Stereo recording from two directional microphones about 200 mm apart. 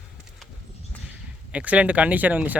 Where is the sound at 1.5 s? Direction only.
5° right (ahead or behind).